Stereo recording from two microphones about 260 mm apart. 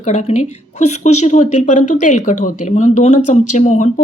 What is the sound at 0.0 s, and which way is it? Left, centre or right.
Speech, left.